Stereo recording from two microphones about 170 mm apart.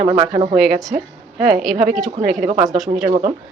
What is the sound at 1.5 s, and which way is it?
Speech, centre (ahead or behind).